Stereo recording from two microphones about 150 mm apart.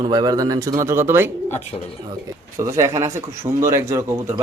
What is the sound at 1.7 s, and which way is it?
Speech, 35° left (ahead or behind).